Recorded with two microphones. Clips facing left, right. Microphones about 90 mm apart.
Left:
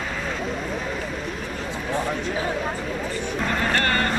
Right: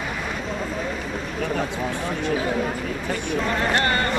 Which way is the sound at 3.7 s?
20° right (ahead or behind).